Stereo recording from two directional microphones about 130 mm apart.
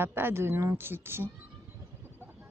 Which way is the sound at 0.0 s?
15° right (ahead or behind).